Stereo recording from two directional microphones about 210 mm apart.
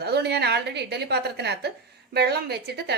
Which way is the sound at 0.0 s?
50° right (ahead or behind).